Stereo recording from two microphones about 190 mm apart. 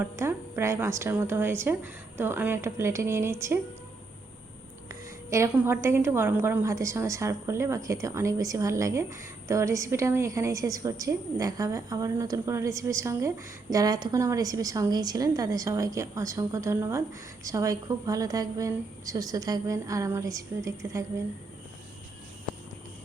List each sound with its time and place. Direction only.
0.0 s a woman's voice: 15° right (ahead or behind)
4.9 s a woman's voice: 15° right (ahead or behind)